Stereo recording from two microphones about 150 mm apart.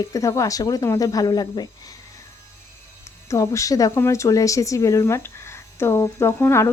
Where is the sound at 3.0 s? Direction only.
20° left (ahead or behind).